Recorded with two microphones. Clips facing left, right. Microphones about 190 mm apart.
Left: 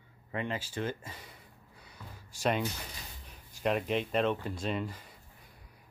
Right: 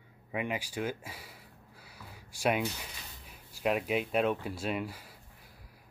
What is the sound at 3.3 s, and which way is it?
Speech, 5° right (ahead or behind).